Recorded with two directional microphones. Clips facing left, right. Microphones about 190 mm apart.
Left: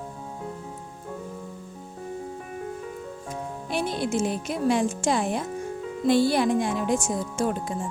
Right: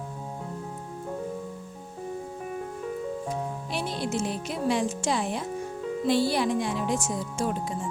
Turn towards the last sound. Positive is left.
turn(degrees=50)  # may be behind; listen again after turning